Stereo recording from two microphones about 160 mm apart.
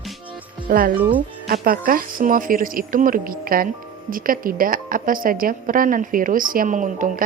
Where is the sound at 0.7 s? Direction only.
60° right (ahead or behind).